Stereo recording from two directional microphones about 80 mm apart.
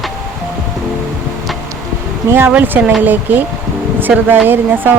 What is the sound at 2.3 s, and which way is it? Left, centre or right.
Speech, right.